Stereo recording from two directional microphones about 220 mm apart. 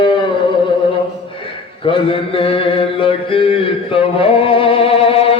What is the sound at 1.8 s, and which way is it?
Mantra, 25° left (ahead or behind).